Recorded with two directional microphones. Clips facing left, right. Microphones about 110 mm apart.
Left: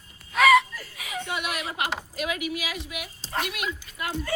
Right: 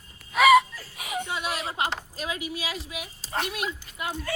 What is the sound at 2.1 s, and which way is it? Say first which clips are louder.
Speech: left 3 dB; 30° right (ahead or behind).